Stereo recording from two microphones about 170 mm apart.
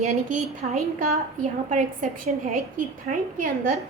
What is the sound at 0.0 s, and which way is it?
A woman's voice, 40° right (ahead or behind).